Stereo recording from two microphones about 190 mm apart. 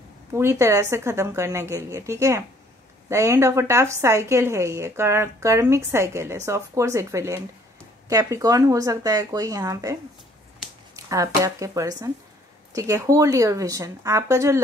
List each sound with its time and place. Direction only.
0.3 s speech: 15° right (ahead or behind)
11.1 s speech: 15° right (ahead or behind)